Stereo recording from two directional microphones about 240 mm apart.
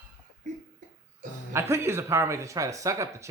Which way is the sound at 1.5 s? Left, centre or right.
Centre.